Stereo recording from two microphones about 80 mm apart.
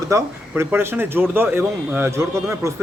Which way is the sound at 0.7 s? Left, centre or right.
Right.